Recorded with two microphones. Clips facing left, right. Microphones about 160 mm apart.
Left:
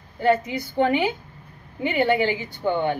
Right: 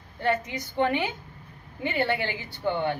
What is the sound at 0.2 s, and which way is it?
A woman's voice, 10° left (ahead or behind).